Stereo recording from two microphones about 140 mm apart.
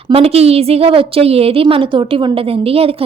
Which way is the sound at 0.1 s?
45° right (ahead or behind).